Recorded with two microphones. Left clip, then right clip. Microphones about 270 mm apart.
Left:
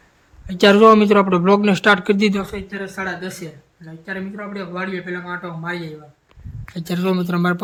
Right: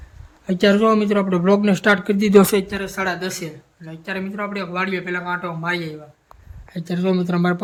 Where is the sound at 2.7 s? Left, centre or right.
Centre.